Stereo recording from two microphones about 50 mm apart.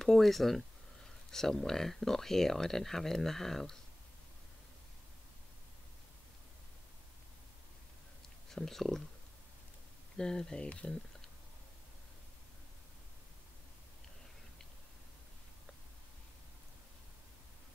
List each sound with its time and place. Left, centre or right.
0.0 s speech: centre
8.5 s speech: centre
10.1 s speech: centre